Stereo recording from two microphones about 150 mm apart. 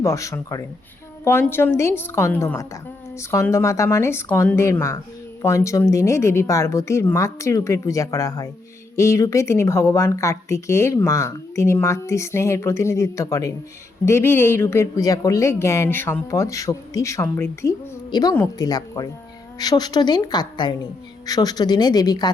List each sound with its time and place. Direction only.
0.0 s a woman's voice: 20° left (ahead or behind)